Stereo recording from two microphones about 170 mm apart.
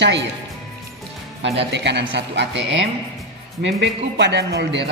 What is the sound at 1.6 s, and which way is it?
Music, 90° right.